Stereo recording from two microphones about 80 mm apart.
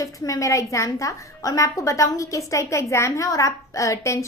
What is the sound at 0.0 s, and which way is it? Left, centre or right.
A woman's voice, left.